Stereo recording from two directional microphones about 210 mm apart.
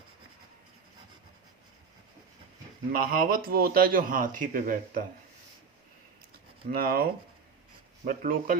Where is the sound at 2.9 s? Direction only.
45° right (ahead or behind).